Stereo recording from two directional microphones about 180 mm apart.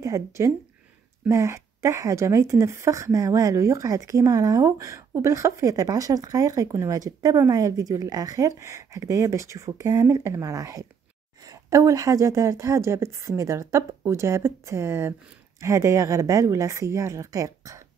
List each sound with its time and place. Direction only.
0.0 s a woman's voice: 15° right (ahead or behind)